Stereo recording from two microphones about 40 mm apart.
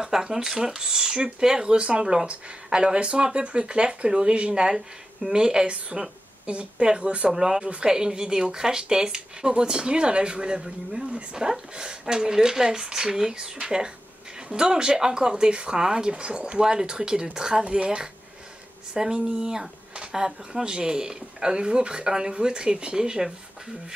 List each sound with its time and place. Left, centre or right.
0.0 s speech: centre; by 7.2 s right
7.2 s speech: centre